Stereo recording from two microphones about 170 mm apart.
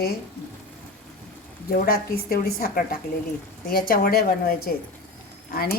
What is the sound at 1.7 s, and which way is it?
A woman's voice, 60° left (ahead or behind).